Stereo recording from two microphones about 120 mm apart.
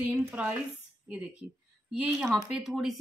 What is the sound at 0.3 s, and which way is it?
Speech, 10° right (ahead or behind).